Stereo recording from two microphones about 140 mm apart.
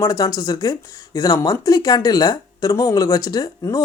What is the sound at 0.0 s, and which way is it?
Speech, 25° left (ahead or behind).